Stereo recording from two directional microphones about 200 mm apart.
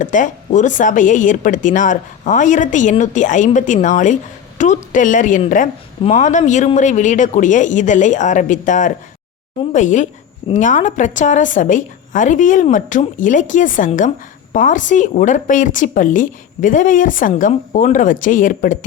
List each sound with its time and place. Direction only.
0.0 s a woman's voice: 40° left (ahead or behind)